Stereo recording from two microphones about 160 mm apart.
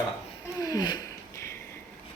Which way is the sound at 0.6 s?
25° left (ahead or behind).